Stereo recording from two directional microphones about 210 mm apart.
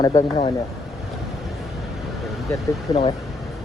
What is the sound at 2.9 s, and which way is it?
Speech, 15° left (ahead or behind).